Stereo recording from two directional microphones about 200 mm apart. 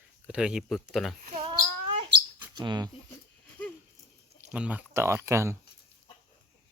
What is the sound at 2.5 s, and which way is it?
Speech, 20° right (ahead or behind).